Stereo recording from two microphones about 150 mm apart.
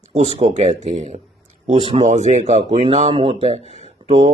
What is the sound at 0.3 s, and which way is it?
Speech, 45° right (ahead or behind).